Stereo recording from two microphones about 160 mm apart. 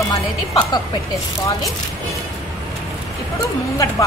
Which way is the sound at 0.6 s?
25° left (ahead or behind).